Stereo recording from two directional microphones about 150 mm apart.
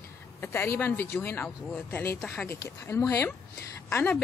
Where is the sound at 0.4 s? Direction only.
15° left (ahead or behind).